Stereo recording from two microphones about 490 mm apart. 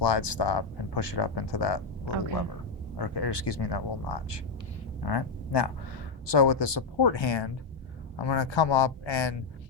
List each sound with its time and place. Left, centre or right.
0.0 s speech: left
3.0 s speech: left